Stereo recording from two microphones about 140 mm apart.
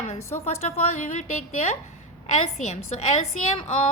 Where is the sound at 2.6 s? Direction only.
55° left (ahead or behind).